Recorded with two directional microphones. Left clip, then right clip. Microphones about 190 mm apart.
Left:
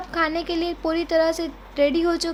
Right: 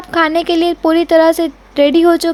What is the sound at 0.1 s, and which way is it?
Speech, 50° right (ahead or behind).